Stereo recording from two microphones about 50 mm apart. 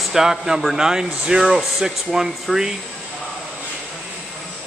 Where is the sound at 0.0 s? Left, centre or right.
Centre.